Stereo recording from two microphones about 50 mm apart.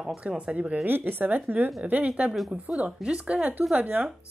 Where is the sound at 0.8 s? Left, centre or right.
Right.